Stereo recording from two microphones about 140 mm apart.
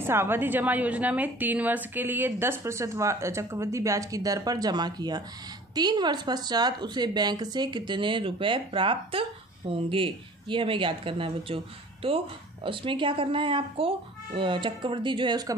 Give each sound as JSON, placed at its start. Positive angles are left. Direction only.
{"t": 0.0, "sound": "a woman's voice", "side_deg": -15}